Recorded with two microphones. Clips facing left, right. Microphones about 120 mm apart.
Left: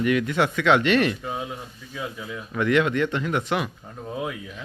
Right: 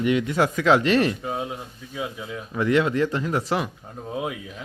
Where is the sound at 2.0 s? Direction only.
25° right (ahead or behind).